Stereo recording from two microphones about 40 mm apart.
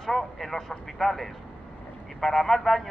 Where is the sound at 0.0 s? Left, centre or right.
Centre.